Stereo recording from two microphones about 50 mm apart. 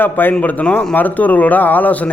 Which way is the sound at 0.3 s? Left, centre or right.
Left.